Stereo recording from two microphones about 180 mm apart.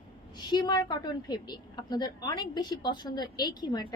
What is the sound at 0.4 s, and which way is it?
A woman's voice, 25° left (ahead or behind).